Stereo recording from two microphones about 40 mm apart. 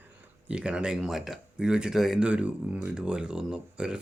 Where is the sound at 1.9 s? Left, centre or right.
Centre.